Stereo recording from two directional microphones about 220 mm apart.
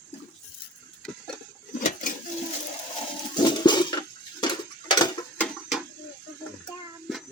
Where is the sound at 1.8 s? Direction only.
35° left (ahead or behind).